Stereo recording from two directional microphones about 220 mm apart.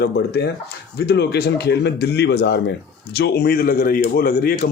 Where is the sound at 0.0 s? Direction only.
45° left (ahead or behind).